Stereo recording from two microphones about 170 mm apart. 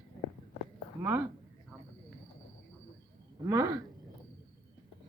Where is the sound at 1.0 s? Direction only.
10° right (ahead or behind).